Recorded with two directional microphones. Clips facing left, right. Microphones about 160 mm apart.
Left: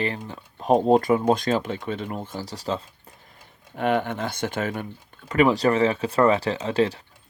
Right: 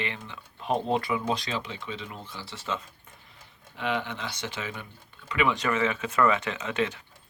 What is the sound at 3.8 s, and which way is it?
Speech, 50° left (ahead or behind).